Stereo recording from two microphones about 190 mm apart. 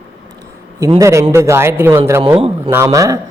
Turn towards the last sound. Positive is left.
turn(degrees=-15)  # may be behind; listen again after turning